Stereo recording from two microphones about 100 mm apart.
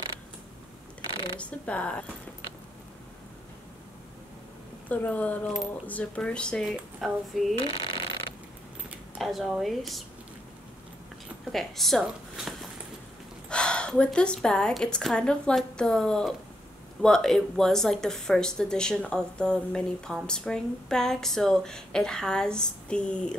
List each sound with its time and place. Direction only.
1.1 s a sound: 50° left (ahead or behind)
1.4 s speech: 10° left (ahead or behind)
4.8 s speech: 15° left (ahead or behind)
7.6 s a sound: 55° left (ahead or behind)
9.2 s speech: centre (ahead or behind)
11.5 s speech: centre (ahead or behind)